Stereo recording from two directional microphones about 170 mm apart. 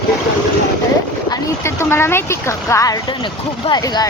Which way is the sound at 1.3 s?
15° left (ahead or behind).